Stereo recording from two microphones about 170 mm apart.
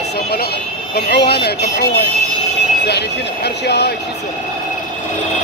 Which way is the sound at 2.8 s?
80° left.